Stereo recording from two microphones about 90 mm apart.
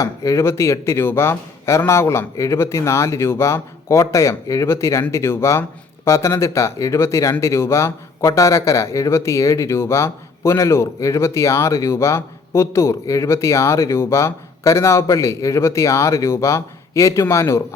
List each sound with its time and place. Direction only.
0.0 s speech: 35° left (ahead or behind)